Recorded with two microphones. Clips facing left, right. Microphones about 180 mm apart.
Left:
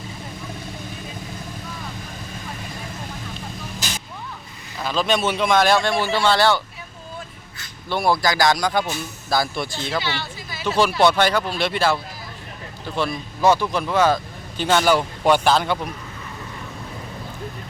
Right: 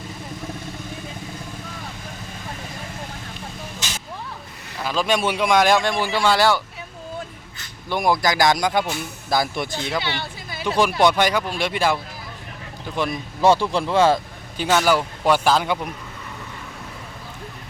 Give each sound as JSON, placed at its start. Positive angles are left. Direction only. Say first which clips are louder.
{"t": 4.8, "sound": "a man's voice", "louder": "even", "side_deg": -10}
{"t": 7.9, "sound": "speech", "louder": "even", "side_deg": -15}
{"t": 10.0, "sound": "speech", "louder": "even", "side_deg": -55}
{"t": 10.8, "sound": "a man's voice", "louder": "left 1 dB", "side_deg": -15}
{"t": 13.0, "sound": "a man's voice", "louder": "even", "side_deg": -15}
{"t": 13.4, "sound": "speech", "louder": "right 1 dB", "side_deg": -30}
{"t": 14.6, "sound": "a man's voice", "louder": "left 1 dB", "side_deg": -5}